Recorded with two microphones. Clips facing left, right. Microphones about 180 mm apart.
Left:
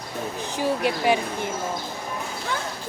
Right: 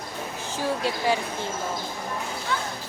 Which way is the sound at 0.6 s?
15° left (ahead or behind).